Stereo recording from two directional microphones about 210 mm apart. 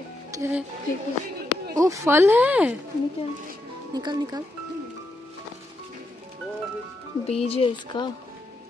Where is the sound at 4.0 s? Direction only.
20° right (ahead or behind).